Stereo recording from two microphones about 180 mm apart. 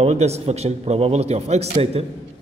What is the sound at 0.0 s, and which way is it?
A man's voice, 35° right (ahead or behind).